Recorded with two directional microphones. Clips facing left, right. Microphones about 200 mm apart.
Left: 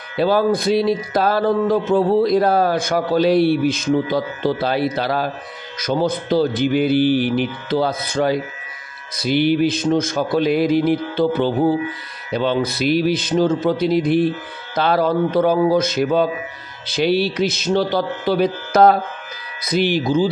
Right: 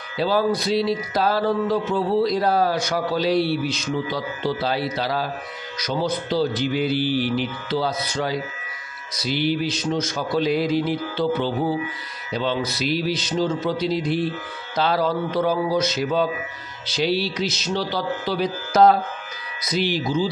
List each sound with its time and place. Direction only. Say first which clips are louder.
0.2 s speech: left 4 dB; 55° left (ahead or behind)